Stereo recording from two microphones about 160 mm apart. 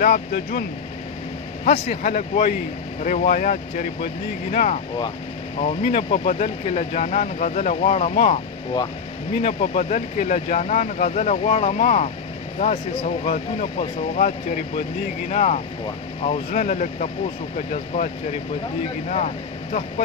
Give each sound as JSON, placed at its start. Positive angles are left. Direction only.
{"t": 0.0, "sound": "speech", "side_deg": 65}
{"t": 1.7, "sound": "speech", "side_deg": 60}
{"t": 9.4, "sound": "speech", "side_deg": 40}